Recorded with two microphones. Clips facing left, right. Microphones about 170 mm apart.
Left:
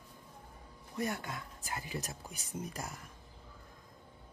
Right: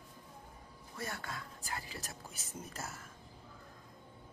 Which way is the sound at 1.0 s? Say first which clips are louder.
Left 6 dB; 15° left (ahead or behind).